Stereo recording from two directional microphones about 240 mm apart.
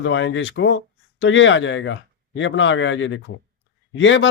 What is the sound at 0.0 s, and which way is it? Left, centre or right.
A man's voice, left.